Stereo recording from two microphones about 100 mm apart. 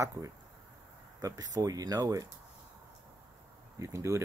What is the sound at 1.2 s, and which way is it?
Speech, 35° right (ahead or behind).